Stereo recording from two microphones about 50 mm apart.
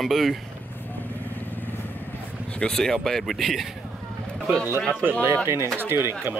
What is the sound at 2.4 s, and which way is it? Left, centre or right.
Speech, centre.